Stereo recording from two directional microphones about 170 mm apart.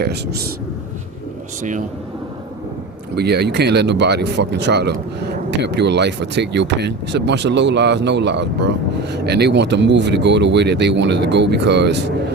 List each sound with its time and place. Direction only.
0.0 s speech: 70° right (ahead or behind)
3.2 s speech: 75° right (ahead or behind); by 8.7 s 90° right
9.1 s speech: 75° right (ahead or behind); by 12.1 s 90° right